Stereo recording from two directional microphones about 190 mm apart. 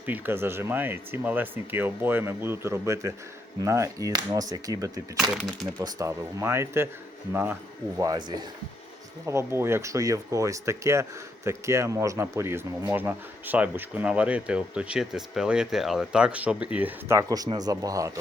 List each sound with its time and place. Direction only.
0.0 s a man's voice: 10° right (ahead or behind)
5.3 s speech: centre (ahead or behind)
5.8 s a man's voice: 15° right (ahead or behind)
7.9 s a man's voice: 20° right (ahead or behind)